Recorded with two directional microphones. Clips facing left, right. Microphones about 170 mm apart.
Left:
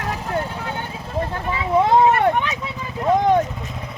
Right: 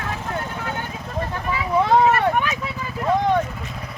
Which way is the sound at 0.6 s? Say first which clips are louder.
Even; 20° left (ahead or behind).